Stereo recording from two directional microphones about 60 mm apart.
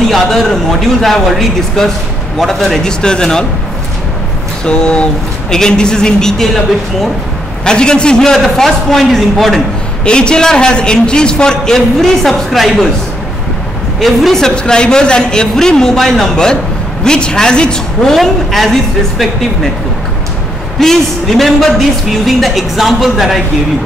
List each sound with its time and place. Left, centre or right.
0.1 s a man's voice: centre
4.6 s a man's voice: centre
7.6 s a man's voice: centre
10.0 s a man's voice: centre
13.9 s a man's voice: centre
20.8 s speech: centre